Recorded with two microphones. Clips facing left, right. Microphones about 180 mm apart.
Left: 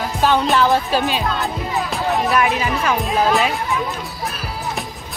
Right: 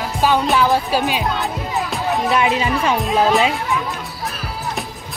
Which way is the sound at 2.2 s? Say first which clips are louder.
Right 3 dB; 25° right (ahead or behind).